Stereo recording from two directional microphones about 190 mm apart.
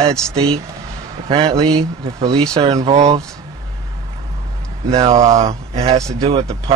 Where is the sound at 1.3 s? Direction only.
25° right (ahead or behind).